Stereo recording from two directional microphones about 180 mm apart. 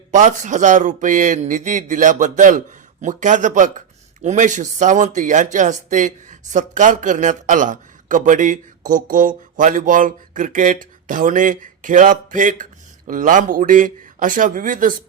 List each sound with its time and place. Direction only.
0.1 s speech: 45° right (ahead or behind)